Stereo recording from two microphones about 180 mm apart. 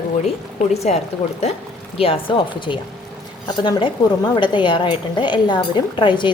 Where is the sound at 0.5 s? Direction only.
35° left (ahead or behind).